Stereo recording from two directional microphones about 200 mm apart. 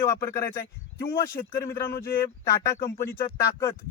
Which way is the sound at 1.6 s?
15° left (ahead or behind).